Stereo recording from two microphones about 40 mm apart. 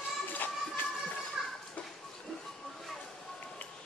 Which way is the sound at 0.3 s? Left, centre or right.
Left.